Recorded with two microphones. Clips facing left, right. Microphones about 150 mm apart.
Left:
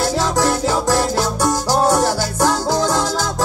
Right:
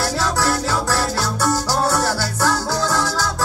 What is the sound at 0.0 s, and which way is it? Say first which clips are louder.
Music: left 3 dB; 20° left (ahead or behind).